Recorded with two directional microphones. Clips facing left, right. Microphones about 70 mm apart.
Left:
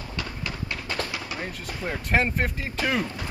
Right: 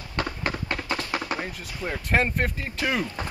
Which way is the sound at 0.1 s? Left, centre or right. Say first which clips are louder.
Right 6 dB; right.